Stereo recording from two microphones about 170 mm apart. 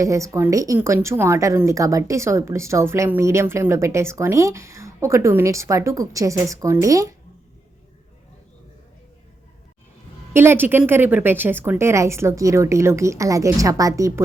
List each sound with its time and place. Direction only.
0.0 s a woman's voice: 20° right (ahead or behind)
10.3 s a woman's voice: 15° right (ahead or behind)